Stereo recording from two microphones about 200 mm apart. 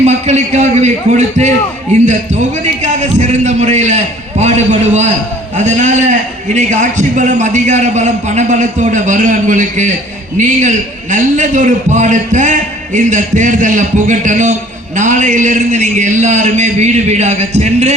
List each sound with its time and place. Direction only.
0.0 s a man's voice: 35° right (ahead or behind)